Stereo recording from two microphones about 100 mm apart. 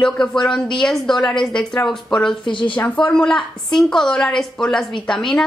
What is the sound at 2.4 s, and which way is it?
Speech, 55° left (ahead or behind).